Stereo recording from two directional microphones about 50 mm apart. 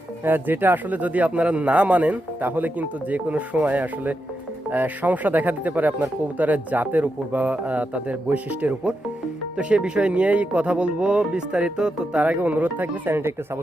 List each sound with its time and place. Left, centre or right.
0.3 s speech: right
11.8 s speech: centre
12.1 s speech: right